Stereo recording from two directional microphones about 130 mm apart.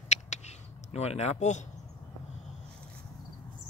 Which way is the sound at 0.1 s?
60° left (ahead or behind).